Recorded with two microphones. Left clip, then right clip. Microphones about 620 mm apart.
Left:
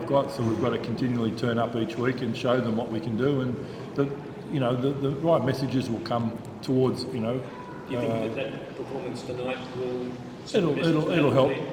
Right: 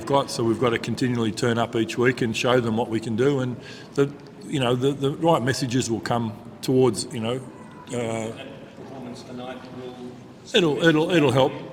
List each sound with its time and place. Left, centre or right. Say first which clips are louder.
0.1 s a man's voice: right 4 dB; right
10.5 s a man's voice: right 5 dB; right